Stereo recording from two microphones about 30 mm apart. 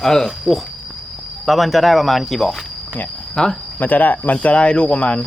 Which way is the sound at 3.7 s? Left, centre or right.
Left.